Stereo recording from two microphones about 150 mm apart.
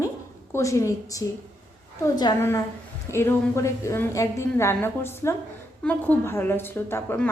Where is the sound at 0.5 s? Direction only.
20° left (ahead or behind).